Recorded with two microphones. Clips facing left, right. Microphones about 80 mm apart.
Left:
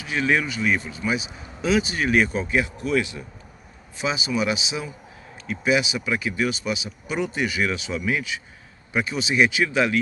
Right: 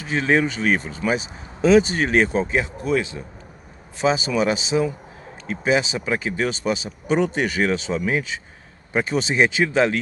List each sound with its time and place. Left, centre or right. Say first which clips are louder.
0.0 s speech: right 3 dB; right
4.0 s speech: right 5 dB; right